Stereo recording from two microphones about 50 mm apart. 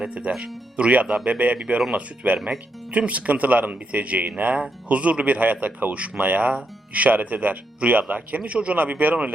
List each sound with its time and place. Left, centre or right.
0.3 s speech: centre; by 9.1 s right